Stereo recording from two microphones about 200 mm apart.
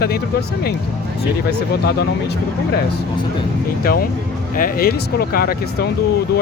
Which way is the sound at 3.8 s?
50° left (ahead or behind).